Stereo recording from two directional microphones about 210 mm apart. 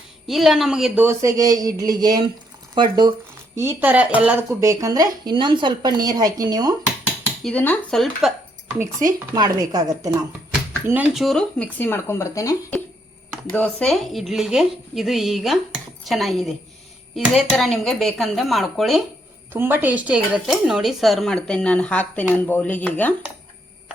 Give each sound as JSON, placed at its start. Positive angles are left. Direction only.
{"t": 0.3, "sound": "speech", "side_deg": 0}
{"t": 7.4, "sound": "speech", "side_deg": 5}
{"t": 9.1, "sound": "speech", "side_deg": -20}